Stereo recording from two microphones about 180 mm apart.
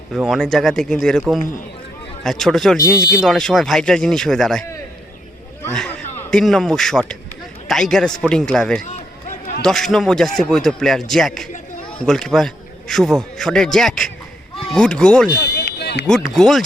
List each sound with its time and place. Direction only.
0.1 s a man's voice: centre (ahead or behind)
2.2 s a man's voice: centre (ahead or behind)
2.7 s speech: 20° left (ahead or behind)
3.2 s a man's voice: 5° left (ahead or behind)
5.7 s a man's voice: 5° left (ahead or behind)
15.4 s a sound: 70° left (ahead or behind)
16.0 s a man's voice: centre (ahead or behind)